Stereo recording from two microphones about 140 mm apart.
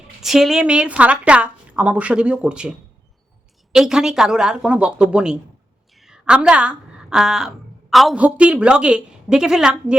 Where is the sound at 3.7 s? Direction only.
5° right (ahead or behind).